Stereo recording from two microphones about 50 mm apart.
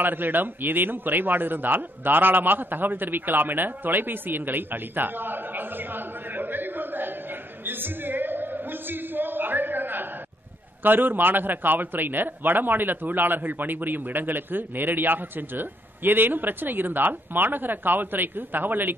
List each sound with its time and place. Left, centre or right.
0.0 s a man's voice: right
7.6 s a sound: right
10.8 s a man's voice: right